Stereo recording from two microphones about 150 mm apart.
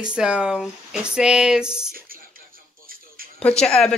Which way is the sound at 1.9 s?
75° right (ahead or behind).